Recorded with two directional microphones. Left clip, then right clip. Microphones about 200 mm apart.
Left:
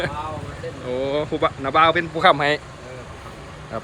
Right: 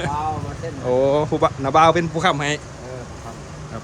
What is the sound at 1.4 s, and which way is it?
Speech, 25° right (ahead or behind).